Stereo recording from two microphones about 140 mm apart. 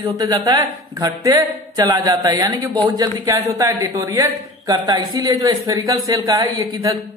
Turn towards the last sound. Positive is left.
turn(degrees=-25)  # may be behind; listen again after turning